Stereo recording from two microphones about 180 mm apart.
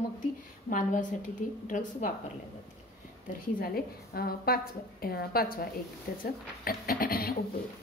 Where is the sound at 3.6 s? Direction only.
55° left (ahead or behind).